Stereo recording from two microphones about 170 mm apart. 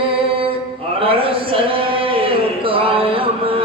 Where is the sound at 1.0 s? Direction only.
30° right (ahead or behind).